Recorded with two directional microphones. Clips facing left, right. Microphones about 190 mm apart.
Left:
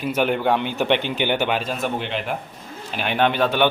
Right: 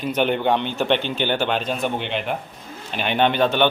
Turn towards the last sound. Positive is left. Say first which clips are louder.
# right 1 dB
turn(degrees=5)  # may be behind; listen again after turning